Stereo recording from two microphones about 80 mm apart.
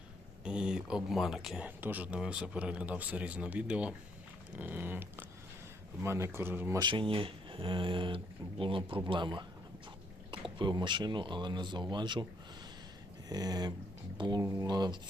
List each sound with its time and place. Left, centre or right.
0.4 s speech: centre
1.6 s cat: right
2.1 s speech: centre
4.5 s cat: right
6.0 s speech: right
6.7 s speech: right
10.6 s speech: right
13.2 s speech: right
14.2 s speech: right